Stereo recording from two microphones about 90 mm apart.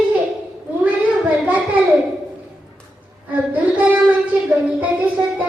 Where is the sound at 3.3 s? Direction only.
15° right (ahead or behind).